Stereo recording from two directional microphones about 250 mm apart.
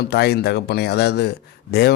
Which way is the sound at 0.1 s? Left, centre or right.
Left.